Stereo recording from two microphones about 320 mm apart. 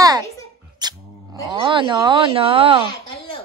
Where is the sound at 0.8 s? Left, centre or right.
Centre.